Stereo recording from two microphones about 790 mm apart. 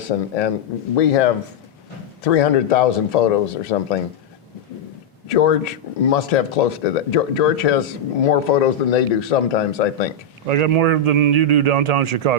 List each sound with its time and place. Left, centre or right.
0.1 s speech: left
5.3 s speech: left
10.4 s a man's voice: right